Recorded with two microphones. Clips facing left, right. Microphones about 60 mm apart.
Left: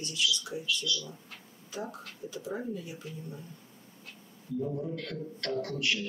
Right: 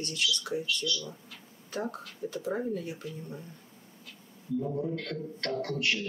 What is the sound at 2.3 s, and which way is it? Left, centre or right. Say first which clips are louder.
Speech: right 4 dB; right.